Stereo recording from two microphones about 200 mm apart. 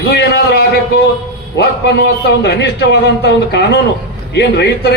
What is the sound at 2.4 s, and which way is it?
A man's voice, 60° left (ahead or behind).